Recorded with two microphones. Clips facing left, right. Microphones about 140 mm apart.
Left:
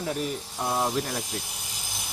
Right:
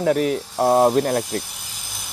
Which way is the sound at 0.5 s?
55° right (ahead or behind).